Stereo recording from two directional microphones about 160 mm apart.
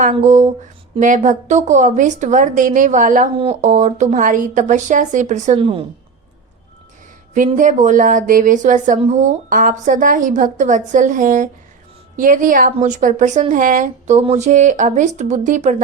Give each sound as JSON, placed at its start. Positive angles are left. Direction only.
{"t": 0.2, "sound": "a woman's voice", "side_deg": -50}
{"t": 3.3, "sound": "a woman's voice", "side_deg": -40}
{"t": 5.5, "sound": "a woman's voice", "side_deg": -35}
{"t": 7.3, "sound": "a woman's voice", "side_deg": -50}